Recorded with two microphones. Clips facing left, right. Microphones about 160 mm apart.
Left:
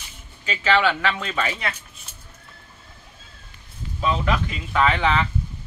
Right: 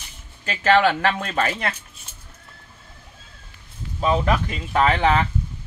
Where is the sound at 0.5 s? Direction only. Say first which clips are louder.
Right 3 dB; 50° right (ahead or behind).